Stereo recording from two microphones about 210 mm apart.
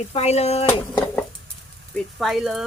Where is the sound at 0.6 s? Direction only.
5° left (ahead or behind).